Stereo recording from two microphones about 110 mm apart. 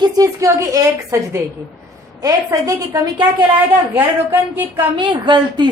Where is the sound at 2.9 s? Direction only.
40° right (ahead or behind).